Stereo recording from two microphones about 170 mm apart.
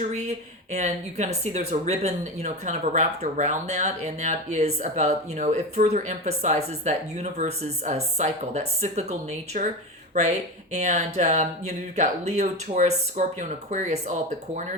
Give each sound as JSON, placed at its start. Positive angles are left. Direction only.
{"t": 0.1, "sound": "speech", "side_deg": -45}
{"t": 10.7, "sound": "speech", "side_deg": -45}